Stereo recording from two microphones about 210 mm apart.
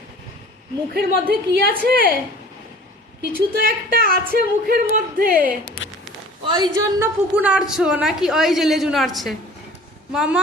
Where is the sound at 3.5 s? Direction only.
45° right (ahead or behind).